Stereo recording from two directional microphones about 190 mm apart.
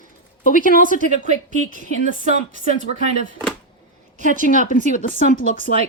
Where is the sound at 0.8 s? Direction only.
45° right (ahead or behind).